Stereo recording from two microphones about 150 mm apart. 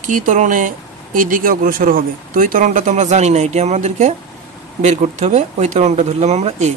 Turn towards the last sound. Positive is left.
turn(degrees=-45)  # may be behind; listen again after turning